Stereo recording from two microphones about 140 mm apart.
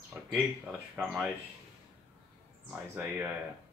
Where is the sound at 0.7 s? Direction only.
5° right (ahead or behind).